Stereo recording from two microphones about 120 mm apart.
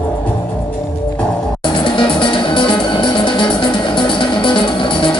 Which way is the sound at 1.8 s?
45° left (ahead or behind).